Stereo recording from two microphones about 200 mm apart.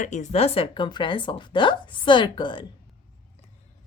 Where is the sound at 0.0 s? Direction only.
35° left (ahead or behind).